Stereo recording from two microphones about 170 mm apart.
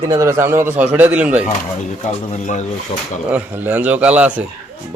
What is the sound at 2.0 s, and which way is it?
Speech, 40° left (ahead or behind).